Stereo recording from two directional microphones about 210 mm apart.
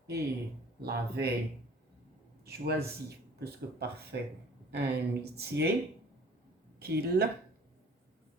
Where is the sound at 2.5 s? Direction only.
50° right (ahead or behind).